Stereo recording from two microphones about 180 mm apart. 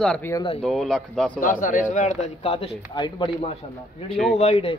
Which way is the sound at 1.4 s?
50° left (ahead or behind).